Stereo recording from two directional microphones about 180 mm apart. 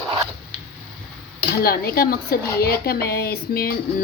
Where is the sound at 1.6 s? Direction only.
55° left (ahead or behind).